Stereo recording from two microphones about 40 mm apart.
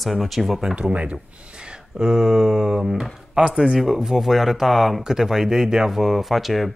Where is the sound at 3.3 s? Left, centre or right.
Right.